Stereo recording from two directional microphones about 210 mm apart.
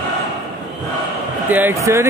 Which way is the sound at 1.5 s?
10° right (ahead or behind).